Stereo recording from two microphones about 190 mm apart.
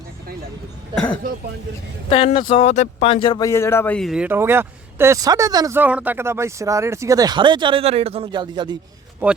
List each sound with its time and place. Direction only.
1.2 s speech: 50° right (ahead or behind)
2.0 s speech: 30° left (ahead or behind)
3.5 s speech: 15° left (ahead or behind); by 8.8 s 25° right (ahead or behind)